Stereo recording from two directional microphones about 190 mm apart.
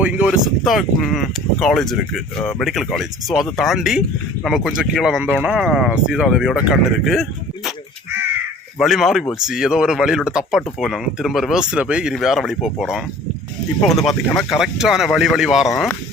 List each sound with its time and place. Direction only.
0.0 s speech: 5° right (ahead or behind)
8.8 s speech: centre (ahead or behind)